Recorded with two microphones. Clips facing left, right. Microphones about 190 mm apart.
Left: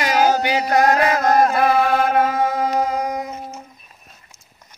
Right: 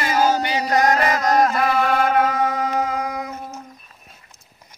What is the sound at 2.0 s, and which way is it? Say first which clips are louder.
Music: left 1 dB; 50° left (ahead or behind).